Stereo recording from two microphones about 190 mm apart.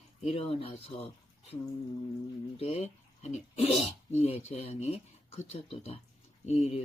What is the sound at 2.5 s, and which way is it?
Speech, 30° left (ahead or behind).